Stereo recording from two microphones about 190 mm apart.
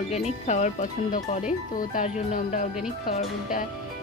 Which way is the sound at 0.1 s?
35° left (ahead or behind).